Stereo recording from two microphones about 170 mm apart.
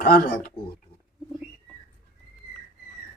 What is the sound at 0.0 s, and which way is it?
Speech, 60° left (ahead or behind).